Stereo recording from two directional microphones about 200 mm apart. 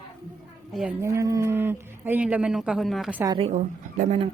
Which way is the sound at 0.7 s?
5° right (ahead or behind).